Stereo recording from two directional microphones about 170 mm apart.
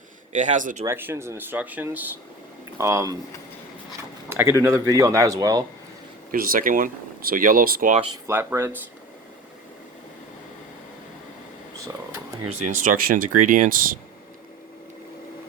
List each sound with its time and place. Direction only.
0.3 s speech: 45° right (ahead or behind)
0.9 s speech: 15° right (ahead or behind)
4.3 s speech: 15° right (ahead or behind)
6.3 s speech: 55° right (ahead or behind)
8.3 s speech: 15° right (ahead or behind)
12.5 s speech: 45° right (ahead or behind)